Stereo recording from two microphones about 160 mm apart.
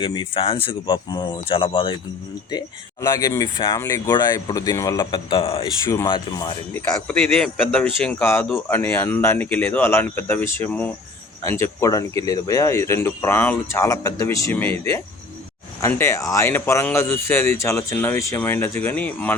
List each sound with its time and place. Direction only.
0.0 s speech: 30° left (ahead or behind)
2.5 s speech: 20° left (ahead or behind)
6.7 s speech: 5° left (ahead or behind)